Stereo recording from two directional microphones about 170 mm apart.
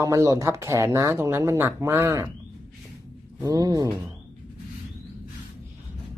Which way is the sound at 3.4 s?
20° right (ahead or behind).